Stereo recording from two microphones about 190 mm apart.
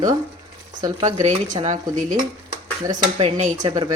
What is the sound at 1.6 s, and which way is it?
Speech, 40° right (ahead or behind).